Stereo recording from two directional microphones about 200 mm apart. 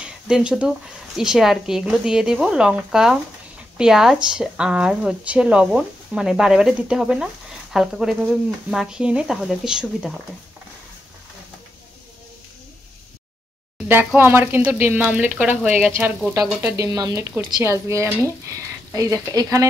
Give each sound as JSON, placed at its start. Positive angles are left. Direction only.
{"t": 0.0, "sound": "speech", "side_deg": -5}
{"t": 13.8, "sound": "speech", "side_deg": -10}
{"t": 16.3, "sound": "speech", "side_deg": -15}